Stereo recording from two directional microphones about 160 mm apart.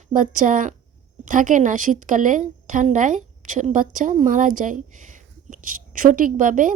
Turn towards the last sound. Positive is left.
turn(degrees=-55)  # may be behind; listen again after turning